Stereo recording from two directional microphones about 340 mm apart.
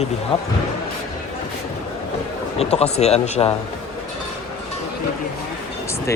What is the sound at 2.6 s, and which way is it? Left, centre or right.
Speech, centre.